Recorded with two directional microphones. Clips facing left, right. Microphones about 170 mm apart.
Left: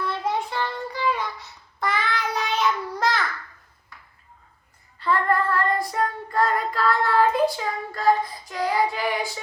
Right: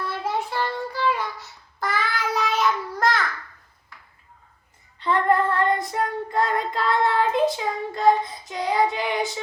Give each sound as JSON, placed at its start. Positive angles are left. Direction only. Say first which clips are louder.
{"t": 0.5, "sound": "child singing", "louder": "right 2 dB", "side_deg": -5}
{"t": 4.9, "sound": "child singing", "louder": "right 2 dB", "side_deg": -20}